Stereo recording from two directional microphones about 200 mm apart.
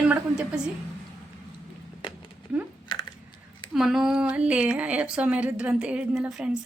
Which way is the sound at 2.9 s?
20° left (ahead or behind).